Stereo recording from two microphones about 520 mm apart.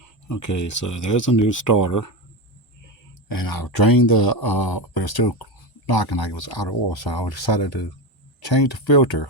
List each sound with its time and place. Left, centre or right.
0.0 s speech: left